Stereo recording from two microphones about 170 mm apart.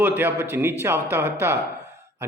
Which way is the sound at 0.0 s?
10° right (ahead or behind).